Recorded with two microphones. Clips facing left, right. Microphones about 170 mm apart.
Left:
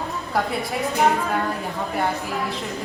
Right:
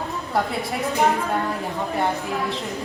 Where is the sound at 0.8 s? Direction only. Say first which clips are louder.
Even; centre (ahead or behind).